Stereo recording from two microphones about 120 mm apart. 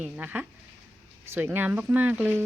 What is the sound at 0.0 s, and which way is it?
Speech, 15° right (ahead or behind).